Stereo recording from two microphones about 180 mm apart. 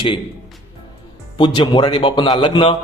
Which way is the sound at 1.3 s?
25° left (ahead or behind).